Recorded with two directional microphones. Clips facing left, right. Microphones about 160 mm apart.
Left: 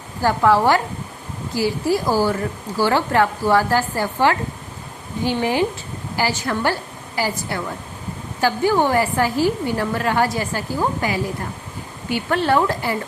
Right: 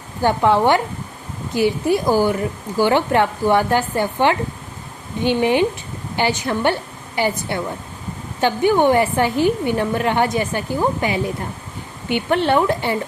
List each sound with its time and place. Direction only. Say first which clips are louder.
0.2 s speech: right 1 dB; 20° right (ahead or behind)